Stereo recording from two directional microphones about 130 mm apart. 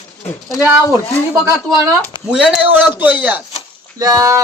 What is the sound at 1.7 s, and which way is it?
Speech, 25° right (ahead or behind).